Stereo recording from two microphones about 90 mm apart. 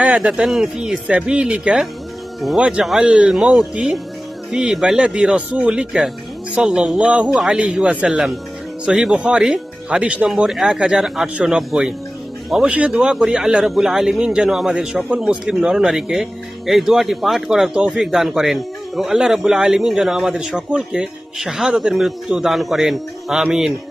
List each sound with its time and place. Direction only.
0.0 s a man's voice: 10° right (ahead or behind)
10.2 s a man's voice: 5° right (ahead or behind)